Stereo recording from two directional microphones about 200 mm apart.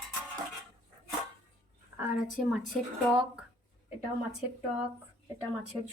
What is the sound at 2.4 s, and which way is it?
Speech, centre (ahead or behind).